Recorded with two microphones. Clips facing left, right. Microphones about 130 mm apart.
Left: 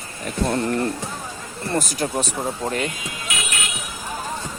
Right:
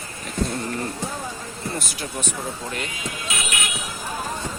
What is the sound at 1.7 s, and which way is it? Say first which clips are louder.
Speech: left 13 dB; 40° left (ahead or behind).